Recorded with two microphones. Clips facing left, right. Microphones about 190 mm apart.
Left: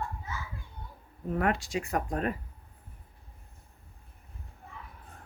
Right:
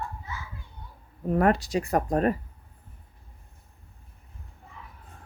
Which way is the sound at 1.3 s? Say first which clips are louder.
Right 6 dB; 40° right (ahead or behind).